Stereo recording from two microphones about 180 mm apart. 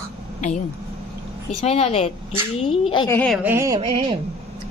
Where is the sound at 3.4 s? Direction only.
15° right (ahead or behind).